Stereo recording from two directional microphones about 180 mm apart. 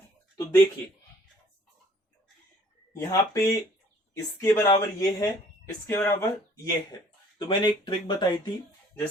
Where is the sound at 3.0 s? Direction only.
15° left (ahead or behind).